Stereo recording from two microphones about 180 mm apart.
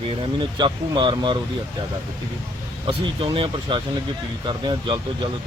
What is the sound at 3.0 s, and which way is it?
Speech, 25° right (ahead or behind).